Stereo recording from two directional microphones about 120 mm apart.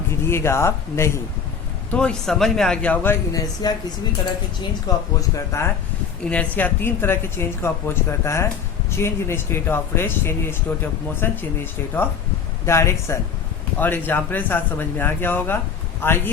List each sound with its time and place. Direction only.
0.1 s speech: 20° left (ahead or behind)
1.9 s speech: 10° left (ahead or behind)
3.6 s speech: 35° left (ahead or behind)
4.9 s speech: 35° left (ahead or behind)
6.2 s speech: 10° left (ahead or behind)